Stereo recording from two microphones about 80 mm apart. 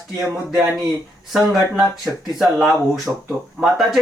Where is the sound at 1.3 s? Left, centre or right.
Centre.